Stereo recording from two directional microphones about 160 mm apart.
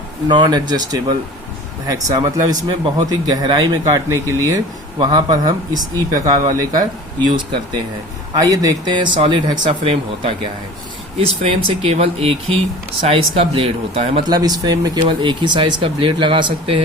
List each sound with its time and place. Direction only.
0.3 s speech: 30° right (ahead or behind)
14.3 s speech: 25° right (ahead or behind)